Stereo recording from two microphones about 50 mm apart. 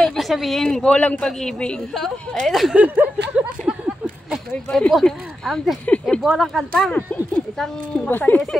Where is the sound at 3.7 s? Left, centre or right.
Right.